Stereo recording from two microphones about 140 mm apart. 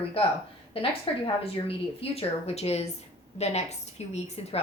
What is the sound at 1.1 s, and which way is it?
A woman's voice, 40° left (ahead or behind).